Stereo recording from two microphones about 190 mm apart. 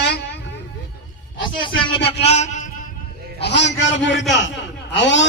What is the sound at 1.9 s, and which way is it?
Speech, 30° left (ahead or behind).